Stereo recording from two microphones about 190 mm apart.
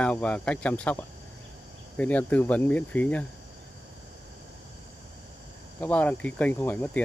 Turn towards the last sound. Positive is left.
turn(degrees=10)  # may be behind; listen again after turning